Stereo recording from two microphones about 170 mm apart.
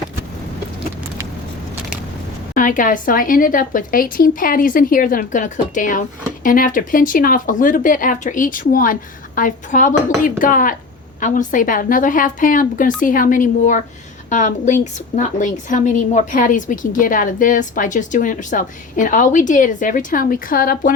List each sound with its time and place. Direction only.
2.6 s speech: 50° left (ahead or behind)